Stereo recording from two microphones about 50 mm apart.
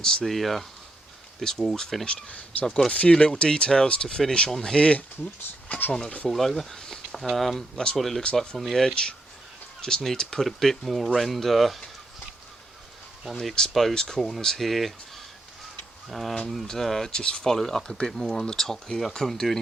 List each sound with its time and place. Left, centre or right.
0.0 s speech: centre
0.3 s speech: centre
2.9 s speech: left
5.6 s speech: left
6.2 s speech: centre
13.4 s speech: centre
16.0 s speech: centre